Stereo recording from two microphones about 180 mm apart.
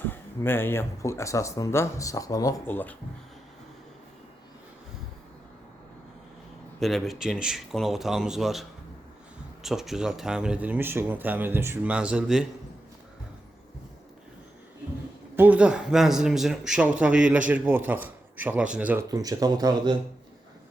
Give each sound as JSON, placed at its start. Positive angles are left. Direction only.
{"t": 0.1, "sound": "speech", "side_deg": 10}
{"t": 6.7, "sound": "speech", "side_deg": 0}
{"t": 9.6, "sound": "speech", "side_deg": 0}
{"t": 15.4, "sound": "speech", "side_deg": -10}
{"t": 19.0, "sound": "speech", "side_deg": -20}